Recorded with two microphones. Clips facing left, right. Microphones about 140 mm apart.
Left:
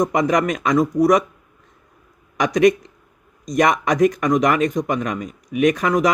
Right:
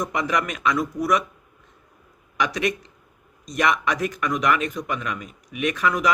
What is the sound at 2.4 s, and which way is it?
Speech, 40° left (ahead or behind).